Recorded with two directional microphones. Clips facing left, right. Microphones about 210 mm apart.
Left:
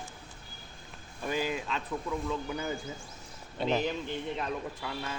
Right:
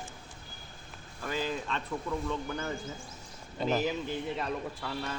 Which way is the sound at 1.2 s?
15° left (ahead or behind).